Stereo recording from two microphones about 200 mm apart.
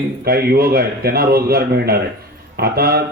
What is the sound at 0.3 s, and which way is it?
Speech, 50° right (ahead or behind).